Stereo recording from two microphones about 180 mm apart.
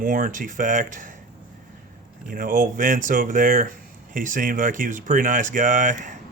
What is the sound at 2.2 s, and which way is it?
Speech, 50° right (ahead or behind).